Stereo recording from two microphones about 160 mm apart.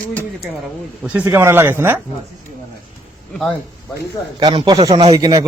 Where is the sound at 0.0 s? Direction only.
10° left (ahead or behind).